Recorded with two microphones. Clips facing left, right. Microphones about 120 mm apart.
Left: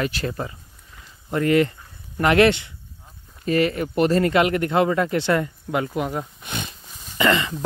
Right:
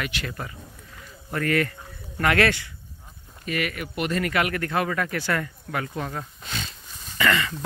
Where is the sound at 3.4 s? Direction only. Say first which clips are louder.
Left 8 dB; 30° left (ahead or behind).